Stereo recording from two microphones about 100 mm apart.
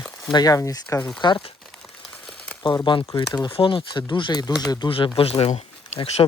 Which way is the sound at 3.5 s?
60° left (ahead or behind).